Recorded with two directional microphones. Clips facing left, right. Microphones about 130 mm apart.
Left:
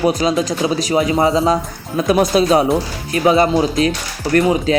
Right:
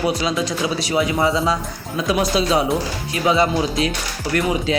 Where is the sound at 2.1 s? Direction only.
50° left (ahead or behind).